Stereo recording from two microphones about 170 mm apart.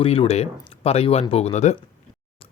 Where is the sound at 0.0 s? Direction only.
35° left (ahead or behind).